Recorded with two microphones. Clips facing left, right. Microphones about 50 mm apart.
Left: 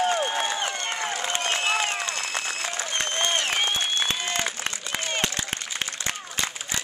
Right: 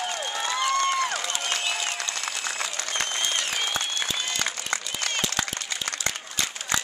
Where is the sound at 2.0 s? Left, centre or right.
Left.